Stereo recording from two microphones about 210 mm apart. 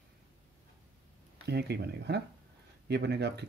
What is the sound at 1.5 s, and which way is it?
Speech, 50° right (ahead or behind).